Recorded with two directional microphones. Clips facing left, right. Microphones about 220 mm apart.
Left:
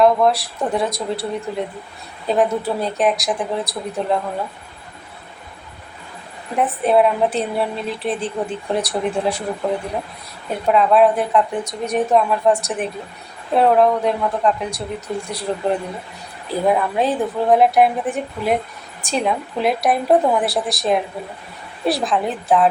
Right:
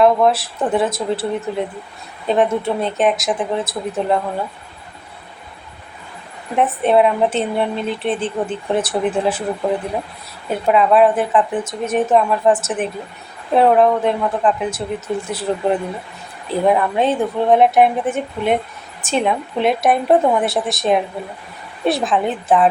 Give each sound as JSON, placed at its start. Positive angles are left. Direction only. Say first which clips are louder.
{"t": 0.0, "sound": "a woman's voice", "louder": "right 1 dB", "side_deg": 0}
{"t": 6.6, "sound": "a woman's voice", "louder": "right 1 dB", "side_deg": 0}
{"t": 16.6, "sound": "a woman's voice", "louder": "right 2 dB", "side_deg": 0}